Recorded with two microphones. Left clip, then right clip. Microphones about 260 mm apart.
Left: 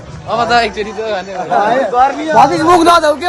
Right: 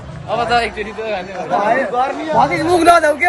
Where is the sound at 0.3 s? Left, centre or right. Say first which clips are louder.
Left 4 dB; left.